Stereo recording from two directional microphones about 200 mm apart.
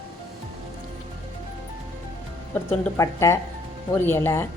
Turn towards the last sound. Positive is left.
turn(degrees=10)  # may be behind; listen again after turning